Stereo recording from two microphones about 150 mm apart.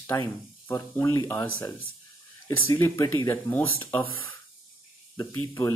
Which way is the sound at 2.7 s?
15° left (ahead or behind).